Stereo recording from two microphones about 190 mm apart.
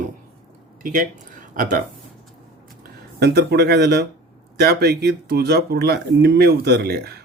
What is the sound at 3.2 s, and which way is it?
Speech, 55° right (ahead or behind).